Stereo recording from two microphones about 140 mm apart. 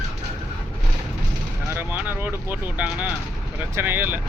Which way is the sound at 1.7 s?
15° right (ahead or behind).